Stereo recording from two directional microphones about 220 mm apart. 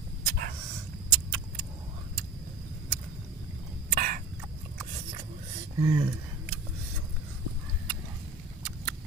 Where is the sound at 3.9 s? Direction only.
40° right (ahead or behind).